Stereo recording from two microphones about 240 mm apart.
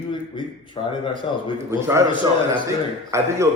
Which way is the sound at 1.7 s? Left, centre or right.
Centre.